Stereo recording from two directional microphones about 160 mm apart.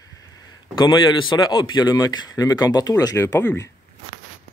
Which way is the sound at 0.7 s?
30° left (ahead or behind).